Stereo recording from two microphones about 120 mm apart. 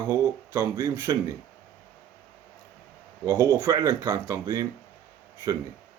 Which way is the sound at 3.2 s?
25° right (ahead or behind).